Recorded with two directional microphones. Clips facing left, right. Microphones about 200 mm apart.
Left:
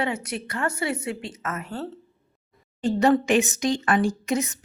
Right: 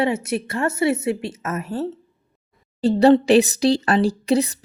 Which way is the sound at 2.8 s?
35° right (ahead or behind).